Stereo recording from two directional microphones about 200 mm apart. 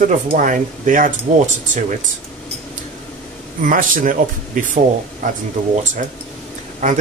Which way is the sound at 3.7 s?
40° right (ahead or behind).